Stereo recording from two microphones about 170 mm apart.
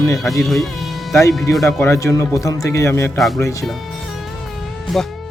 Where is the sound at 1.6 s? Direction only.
15° left (ahead or behind).